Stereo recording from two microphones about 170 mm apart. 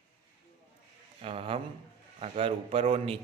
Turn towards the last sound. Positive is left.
turn(degrees=-35)  # may be behind; listen again after turning